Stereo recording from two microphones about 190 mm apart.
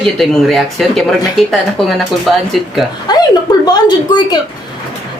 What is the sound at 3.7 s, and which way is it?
Speech, 20° left (ahead or behind).